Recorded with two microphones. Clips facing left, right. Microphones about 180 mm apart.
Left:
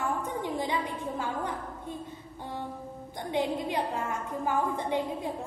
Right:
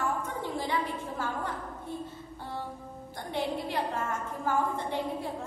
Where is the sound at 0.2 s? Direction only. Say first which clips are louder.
Left 2 dB; 15° left (ahead or behind).